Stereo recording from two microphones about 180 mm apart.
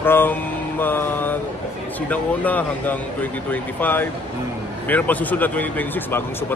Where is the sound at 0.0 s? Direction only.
10° left (ahead or behind).